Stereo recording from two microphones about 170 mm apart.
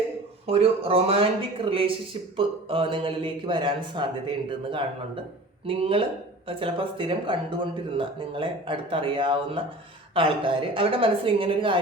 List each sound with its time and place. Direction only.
0.4 s a woman's voice: 35° right (ahead or behind)